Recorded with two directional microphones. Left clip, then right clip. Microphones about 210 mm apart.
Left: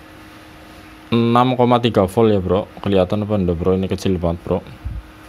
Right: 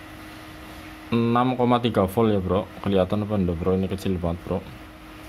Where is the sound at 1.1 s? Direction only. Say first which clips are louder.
Left 7 dB; 25° left (ahead or behind).